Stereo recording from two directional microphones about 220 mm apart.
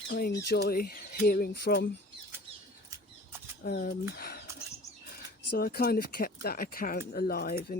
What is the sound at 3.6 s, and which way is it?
Speech, 45° left (ahead or behind).